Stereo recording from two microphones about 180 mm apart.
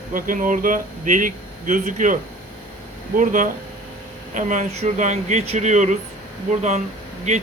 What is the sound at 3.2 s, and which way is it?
Speech, 45° right (ahead or behind).